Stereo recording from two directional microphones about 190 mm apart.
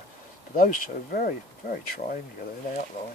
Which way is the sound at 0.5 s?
50° left (ahead or behind).